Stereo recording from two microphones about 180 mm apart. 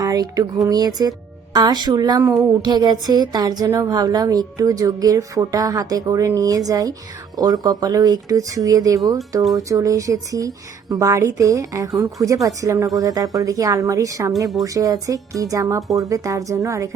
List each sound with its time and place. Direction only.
0.0 s speech: 20° right (ahead or behind)